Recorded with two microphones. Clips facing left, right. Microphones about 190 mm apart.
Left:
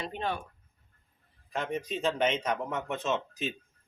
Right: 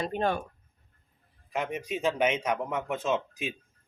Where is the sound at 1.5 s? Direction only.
10° right (ahead or behind).